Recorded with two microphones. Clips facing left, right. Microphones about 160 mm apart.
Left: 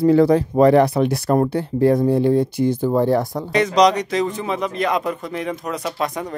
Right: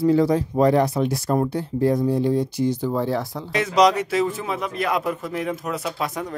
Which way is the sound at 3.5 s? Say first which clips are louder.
Left 2 dB; 5° right (ahead or behind).